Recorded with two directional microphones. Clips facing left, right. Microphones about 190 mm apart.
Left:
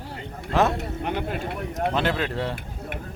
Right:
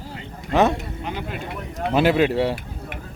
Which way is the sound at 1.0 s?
50° left (ahead or behind).